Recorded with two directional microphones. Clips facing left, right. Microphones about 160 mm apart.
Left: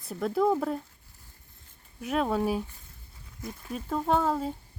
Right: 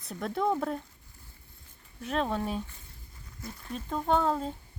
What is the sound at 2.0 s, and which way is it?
Speech, 10° left (ahead or behind).